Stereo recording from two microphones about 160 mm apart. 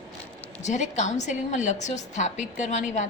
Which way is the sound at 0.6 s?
45° left (ahead or behind).